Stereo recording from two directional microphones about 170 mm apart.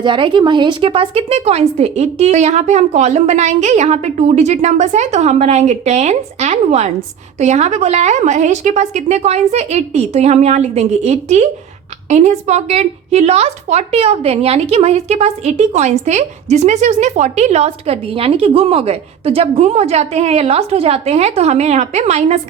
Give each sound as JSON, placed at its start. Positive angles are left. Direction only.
{"t": 0.0, "sound": "a woman's voice", "side_deg": -30}